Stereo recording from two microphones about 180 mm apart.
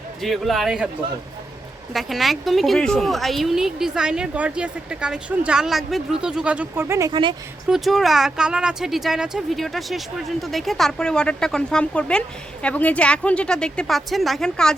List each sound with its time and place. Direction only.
0.2 s a woman's voice: centre (ahead or behind)
1.9 s a woman's voice: centre (ahead or behind)
7.1 s speech: 25° right (ahead or behind)
7.7 s a woman's voice: centre (ahead or behind)